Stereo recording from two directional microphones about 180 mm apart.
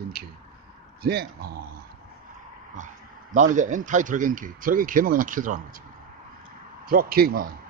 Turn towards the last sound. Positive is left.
turn(degrees=-55)  # may be behind; listen again after turning